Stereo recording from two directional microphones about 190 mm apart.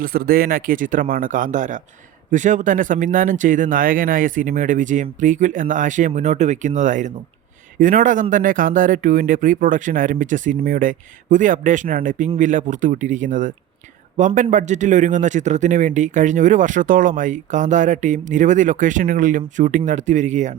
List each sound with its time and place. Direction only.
0.0 s a man's voice: 50° right (ahead or behind)